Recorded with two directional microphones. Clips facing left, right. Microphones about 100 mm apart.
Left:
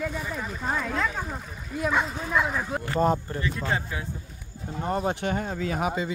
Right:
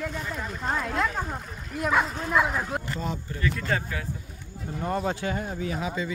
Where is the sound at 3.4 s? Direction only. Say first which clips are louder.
Right 1 dB; 20° left (ahead or behind).